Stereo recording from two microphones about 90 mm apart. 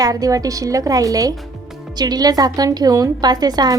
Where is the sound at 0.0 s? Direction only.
40° right (ahead or behind).